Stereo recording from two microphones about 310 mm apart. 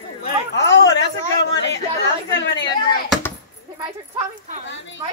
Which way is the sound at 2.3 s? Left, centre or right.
Left.